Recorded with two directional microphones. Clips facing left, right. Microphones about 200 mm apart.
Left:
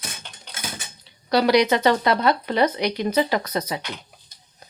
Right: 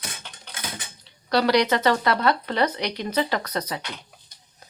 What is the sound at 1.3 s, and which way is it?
Speech, 10° left (ahead or behind).